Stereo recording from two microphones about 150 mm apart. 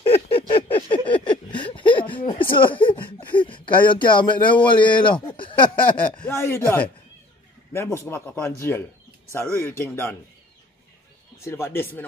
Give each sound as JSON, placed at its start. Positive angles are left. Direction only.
{"t": 0.0, "sound": "a sound", "side_deg": 40}
{"t": 2.3, "sound": "speech", "side_deg": 35}
{"t": 6.0, "sound": "speech", "side_deg": 10}
{"t": 11.4, "sound": "speech", "side_deg": 15}